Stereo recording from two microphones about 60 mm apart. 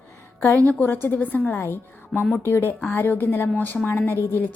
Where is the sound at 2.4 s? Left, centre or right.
Left.